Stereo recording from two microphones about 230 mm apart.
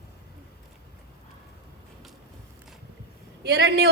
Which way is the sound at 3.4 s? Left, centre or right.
Right.